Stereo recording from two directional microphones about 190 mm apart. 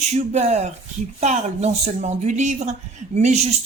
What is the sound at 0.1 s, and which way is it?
A man's voice, 35° right (ahead or behind).